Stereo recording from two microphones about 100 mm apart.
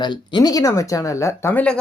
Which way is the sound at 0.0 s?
40° left (ahead or behind).